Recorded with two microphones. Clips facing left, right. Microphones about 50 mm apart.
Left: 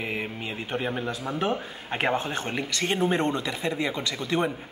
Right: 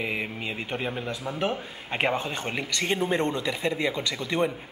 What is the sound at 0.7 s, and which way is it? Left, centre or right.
Speech, centre.